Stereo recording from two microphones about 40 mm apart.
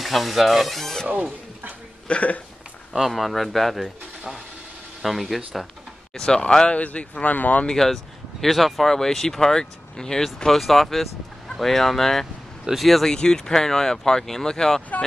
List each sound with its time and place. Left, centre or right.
0.0 s speech: centre
2.0 s speech: left
2.9 s speech: centre
5.0 s speech: centre
6.1 s speech: centre
6.7 s speech: left
7.6 s speech: centre
8.8 s speech: centre
10.6 s speech: centre
13.1 s speech: centre